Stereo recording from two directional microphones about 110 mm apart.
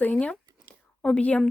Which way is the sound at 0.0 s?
15° left (ahead or behind).